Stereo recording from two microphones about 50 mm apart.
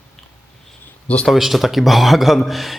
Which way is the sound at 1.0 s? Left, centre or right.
Left.